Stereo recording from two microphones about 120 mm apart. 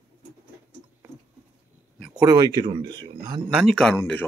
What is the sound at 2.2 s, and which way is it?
Speech, 35° right (ahead or behind).